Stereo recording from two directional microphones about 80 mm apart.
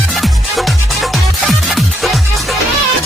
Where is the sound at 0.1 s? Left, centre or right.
Centre.